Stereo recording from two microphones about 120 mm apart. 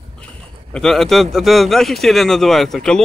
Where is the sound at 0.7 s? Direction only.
5° left (ahead or behind).